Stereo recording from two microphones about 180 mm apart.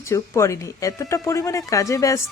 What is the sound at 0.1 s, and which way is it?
Speech, 15° left (ahead or behind).